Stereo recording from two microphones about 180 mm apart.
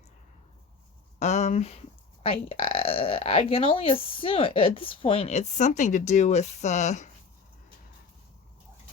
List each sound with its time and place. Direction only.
1.2 s speech: 40° left (ahead or behind)